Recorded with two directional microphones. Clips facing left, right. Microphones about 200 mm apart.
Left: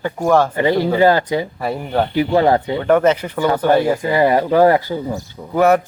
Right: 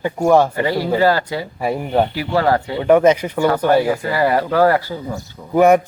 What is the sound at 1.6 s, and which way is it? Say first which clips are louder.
Speech: right 2 dB; 10° right (ahead or behind).